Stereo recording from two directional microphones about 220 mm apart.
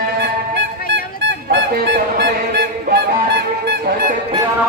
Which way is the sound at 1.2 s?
50° right (ahead or behind).